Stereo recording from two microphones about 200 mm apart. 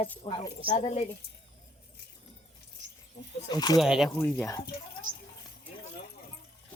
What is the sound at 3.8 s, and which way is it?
Speech, centre (ahead or behind).